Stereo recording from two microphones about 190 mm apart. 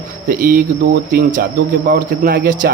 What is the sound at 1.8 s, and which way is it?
Speech, 45° right (ahead or behind).